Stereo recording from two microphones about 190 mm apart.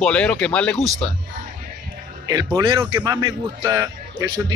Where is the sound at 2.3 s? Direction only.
20° right (ahead or behind).